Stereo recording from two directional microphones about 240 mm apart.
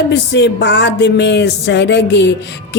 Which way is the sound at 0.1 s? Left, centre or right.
Left.